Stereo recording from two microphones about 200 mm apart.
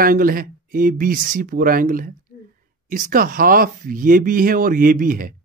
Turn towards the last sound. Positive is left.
turn(degrees=-45)  # may be behind; listen again after turning